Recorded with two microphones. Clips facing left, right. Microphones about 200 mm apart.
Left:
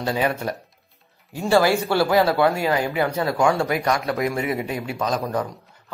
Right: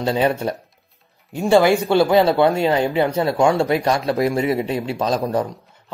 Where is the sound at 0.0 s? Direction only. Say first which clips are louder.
Right 4 dB; 25° right (ahead or behind).